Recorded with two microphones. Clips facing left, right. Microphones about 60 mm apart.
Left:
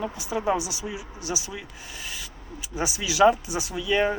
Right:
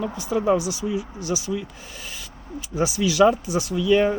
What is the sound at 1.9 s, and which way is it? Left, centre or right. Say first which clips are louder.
Speech: even; centre.